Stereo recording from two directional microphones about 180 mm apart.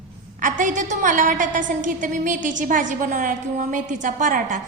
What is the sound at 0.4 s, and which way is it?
A woman's voice, 45° right (ahead or behind).